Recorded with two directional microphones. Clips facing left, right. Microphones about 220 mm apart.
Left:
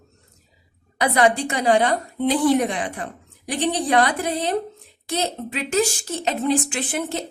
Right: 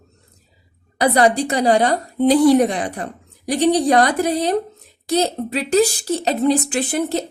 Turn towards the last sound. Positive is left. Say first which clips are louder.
# right 6 dB
turn(degrees=-35)  # may be behind; listen again after turning